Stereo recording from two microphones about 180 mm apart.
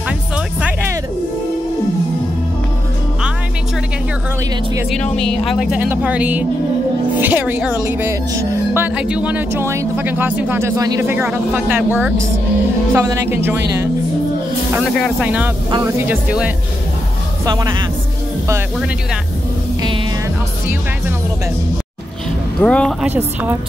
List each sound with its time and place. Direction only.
0.6 s music: 10° right (ahead or behind)
4.9 s a woman's voice: 5° left (ahead or behind); by 13.8 s 10° right (ahead or behind)
15.0 s speech: centre (ahead or behind)
22.6 s speech: 5° left (ahead or behind)
23.0 s speech: 10° right (ahead or behind)